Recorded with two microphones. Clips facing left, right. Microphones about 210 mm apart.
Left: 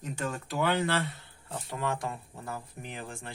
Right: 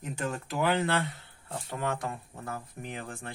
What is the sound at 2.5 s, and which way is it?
Speech, 50° right (ahead or behind).